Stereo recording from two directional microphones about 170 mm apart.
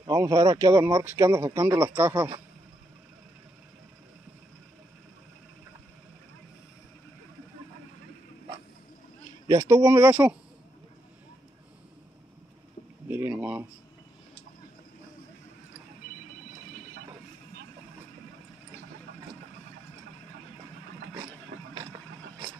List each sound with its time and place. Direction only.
0.0 s speech: 20° right (ahead or behind)
9.5 s speech: 20° right (ahead or behind)
13.1 s a sound: 10° right (ahead or behind)
21.5 s vehicle: 65° right (ahead or behind)